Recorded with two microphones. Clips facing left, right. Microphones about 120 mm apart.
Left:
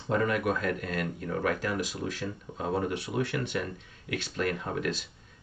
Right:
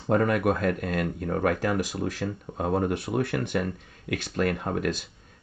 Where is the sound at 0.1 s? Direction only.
50° right (ahead or behind).